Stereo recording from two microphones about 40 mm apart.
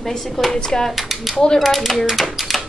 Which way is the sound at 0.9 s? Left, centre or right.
Centre.